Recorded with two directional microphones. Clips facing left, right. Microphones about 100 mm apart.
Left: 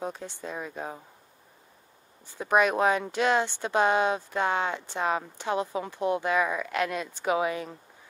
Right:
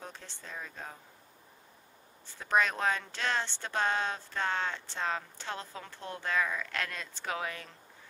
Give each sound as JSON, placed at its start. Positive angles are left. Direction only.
{"t": 0.0, "sound": "speech", "side_deg": 15}
{"t": 2.2, "sound": "speech", "side_deg": 15}